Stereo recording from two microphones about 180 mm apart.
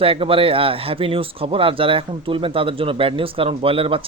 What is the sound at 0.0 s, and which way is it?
Speech, 30° right (ahead or behind).